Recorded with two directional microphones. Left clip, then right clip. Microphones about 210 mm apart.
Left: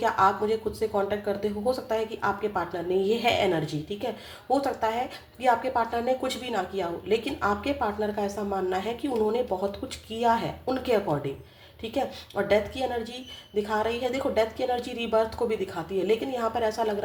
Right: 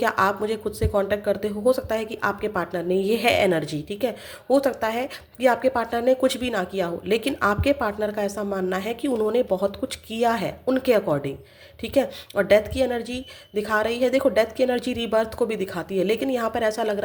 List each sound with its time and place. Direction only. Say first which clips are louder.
0.0 s speech: right 1 dB; 40° right (ahead or behind)